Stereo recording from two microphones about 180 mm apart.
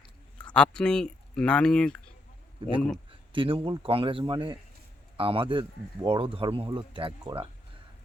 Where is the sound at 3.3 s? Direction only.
30° right (ahead or behind).